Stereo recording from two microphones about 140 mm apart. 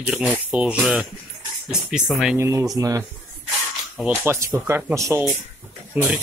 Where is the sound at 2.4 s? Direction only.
20° right (ahead or behind).